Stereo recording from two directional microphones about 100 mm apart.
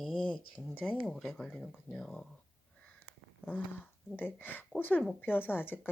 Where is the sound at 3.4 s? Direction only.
20° left (ahead or behind).